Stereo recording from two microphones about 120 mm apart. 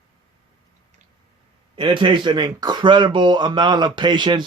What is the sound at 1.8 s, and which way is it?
Speech, 40° right (ahead or behind).